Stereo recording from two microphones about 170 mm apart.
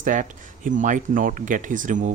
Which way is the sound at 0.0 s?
50° right (ahead or behind).